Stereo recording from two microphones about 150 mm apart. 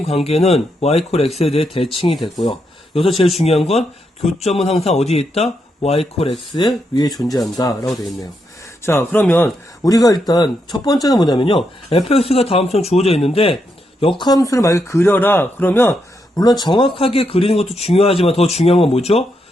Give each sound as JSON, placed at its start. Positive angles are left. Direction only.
{"t": 0.0, "sound": "speech", "side_deg": 40}
{"t": 2.2, "sound": "speech", "side_deg": 25}
{"t": 2.9, "sound": "speech", "side_deg": 40}
{"t": 9.2, "sound": "a man's voice", "side_deg": 5}
{"t": 9.8, "sound": "speech", "side_deg": 25}
{"t": 14.2, "sound": "speech", "side_deg": 25}
{"t": 16.3, "sound": "speech", "side_deg": 25}